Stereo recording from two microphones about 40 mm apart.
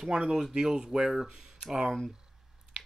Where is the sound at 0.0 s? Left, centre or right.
Centre.